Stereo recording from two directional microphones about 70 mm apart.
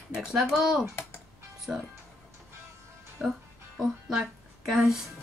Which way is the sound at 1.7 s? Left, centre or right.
Centre.